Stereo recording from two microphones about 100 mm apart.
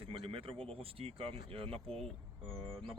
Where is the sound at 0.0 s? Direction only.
65° right (ahead or behind).